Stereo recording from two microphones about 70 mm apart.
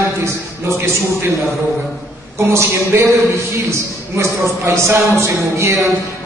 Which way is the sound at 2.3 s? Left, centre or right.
Right.